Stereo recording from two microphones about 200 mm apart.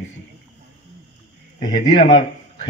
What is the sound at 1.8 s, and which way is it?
Speech, 25° left (ahead or behind).